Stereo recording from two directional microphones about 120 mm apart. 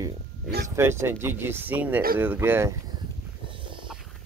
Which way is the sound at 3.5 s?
45° right (ahead or behind).